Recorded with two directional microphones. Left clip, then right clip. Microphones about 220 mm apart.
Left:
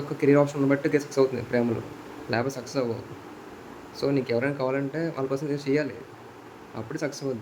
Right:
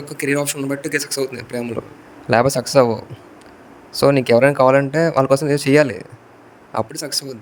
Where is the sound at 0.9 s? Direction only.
50° right (ahead or behind).